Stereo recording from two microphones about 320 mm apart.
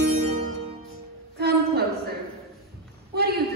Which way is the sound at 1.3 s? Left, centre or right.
Right.